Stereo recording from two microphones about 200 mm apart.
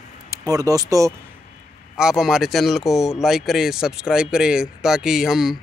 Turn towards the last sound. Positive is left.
turn(degrees=0)  # may be behind; listen again after turning